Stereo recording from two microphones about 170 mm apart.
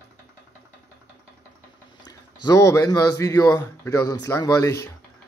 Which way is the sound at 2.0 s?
20° left (ahead or behind).